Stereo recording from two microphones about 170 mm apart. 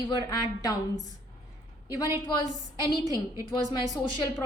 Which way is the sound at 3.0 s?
20° right (ahead or behind).